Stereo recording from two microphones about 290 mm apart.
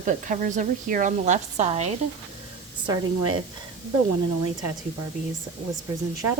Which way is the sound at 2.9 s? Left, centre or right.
Centre.